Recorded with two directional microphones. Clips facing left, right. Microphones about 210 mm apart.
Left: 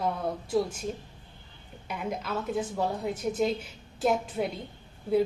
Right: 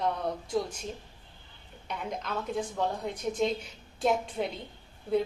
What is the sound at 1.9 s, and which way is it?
A woman's voice, 5° left (ahead or behind).